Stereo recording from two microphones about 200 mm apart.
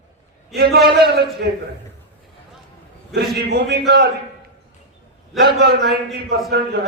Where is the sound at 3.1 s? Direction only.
50° right (ahead or behind).